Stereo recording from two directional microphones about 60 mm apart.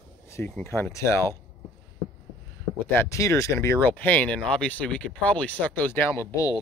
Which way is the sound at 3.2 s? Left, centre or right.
Left.